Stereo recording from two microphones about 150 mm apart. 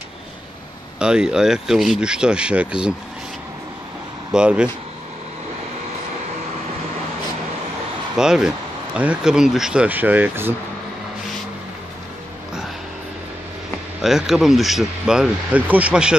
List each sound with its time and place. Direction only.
0.9 s speech: 5° right (ahead or behind)
4.3 s speech: 5° right (ahead or behind)
8.2 s speech: 5° right (ahead or behind)
14.0 s speech: 5° right (ahead or behind)